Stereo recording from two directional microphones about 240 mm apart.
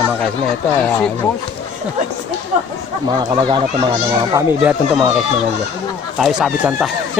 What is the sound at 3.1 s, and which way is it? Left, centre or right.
A child's voice, centre.